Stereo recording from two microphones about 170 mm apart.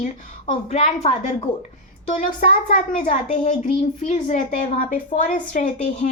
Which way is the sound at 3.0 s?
45° left (ahead or behind).